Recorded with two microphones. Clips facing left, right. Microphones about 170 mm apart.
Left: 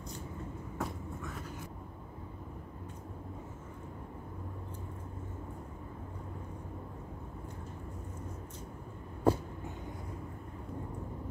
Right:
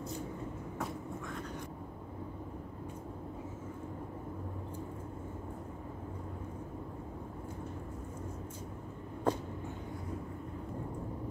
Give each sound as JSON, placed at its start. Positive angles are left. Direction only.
{"t": 0.7, "sound": "vehicle", "side_deg": 0}
{"t": 9.3, "sound": "vehicle", "side_deg": 10}